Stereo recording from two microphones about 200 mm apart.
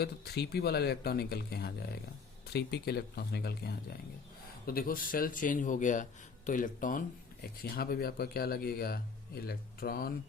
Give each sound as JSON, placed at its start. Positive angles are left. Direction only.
{"t": 0.0, "sound": "speech", "side_deg": 50}